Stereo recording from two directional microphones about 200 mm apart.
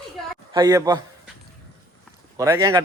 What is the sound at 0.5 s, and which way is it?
Speech, 20° right (ahead or behind).